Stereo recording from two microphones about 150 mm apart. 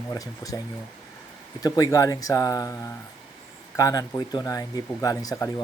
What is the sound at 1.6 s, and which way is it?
Speech, 25° left (ahead or behind).